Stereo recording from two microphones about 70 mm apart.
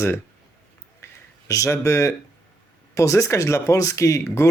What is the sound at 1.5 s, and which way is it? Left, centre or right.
Speech, left.